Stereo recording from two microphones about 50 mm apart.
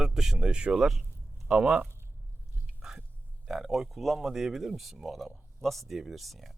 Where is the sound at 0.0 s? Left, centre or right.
Centre.